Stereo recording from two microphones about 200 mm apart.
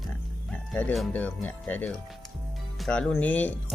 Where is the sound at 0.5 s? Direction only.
5° left (ahead or behind).